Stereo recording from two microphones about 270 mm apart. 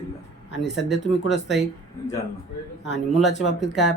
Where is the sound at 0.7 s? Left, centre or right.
Centre.